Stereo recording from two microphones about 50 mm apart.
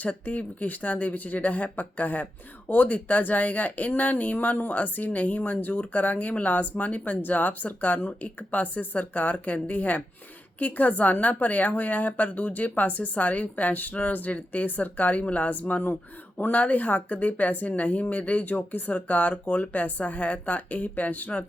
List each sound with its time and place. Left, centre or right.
0.1 s a woman's voice: left